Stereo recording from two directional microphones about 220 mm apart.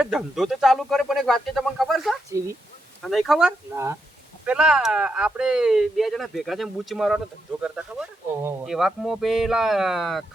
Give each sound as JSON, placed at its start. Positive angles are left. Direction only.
{"t": 0.0, "sound": "speech", "side_deg": 0}
{"t": 8.4, "sound": "speech", "side_deg": 0}